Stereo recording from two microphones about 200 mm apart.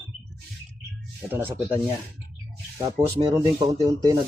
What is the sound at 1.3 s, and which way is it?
Speech, 10° right (ahead or behind).